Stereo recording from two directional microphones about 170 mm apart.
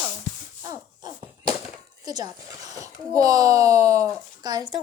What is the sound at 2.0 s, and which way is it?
Speech, 20° right (ahead or behind).